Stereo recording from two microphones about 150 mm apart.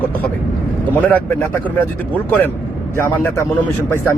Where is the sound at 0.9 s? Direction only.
10° left (ahead or behind).